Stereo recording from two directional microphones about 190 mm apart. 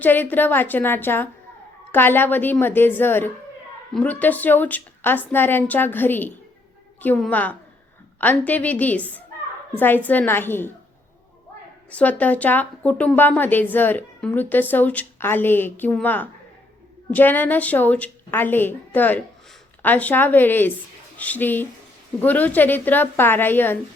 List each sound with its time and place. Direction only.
0.0 s a woman's voice: 10° left (ahead or behind)
11.9 s a woman's voice: 5° left (ahead or behind)